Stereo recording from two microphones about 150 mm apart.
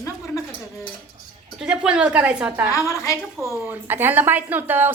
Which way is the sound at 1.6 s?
5° right (ahead or behind).